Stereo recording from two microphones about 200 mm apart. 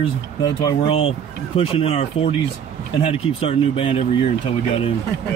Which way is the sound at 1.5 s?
30° left (ahead or behind).